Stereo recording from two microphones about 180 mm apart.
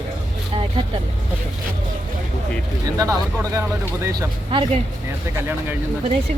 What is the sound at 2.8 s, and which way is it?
Speech, 20° right (ahead or behind).